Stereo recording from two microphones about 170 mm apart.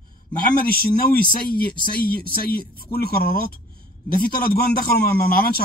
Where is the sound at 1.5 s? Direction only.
55° left (ahead or behind).